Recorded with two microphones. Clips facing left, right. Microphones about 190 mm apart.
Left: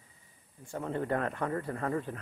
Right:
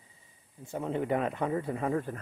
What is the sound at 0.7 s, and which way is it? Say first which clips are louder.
Speech: right 2 dB; 15° right (ahead or behind).